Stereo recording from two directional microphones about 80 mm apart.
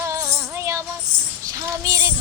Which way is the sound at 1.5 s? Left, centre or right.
Right.